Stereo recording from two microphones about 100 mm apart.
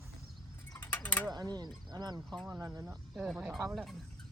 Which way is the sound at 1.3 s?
45° right (ahead or behind).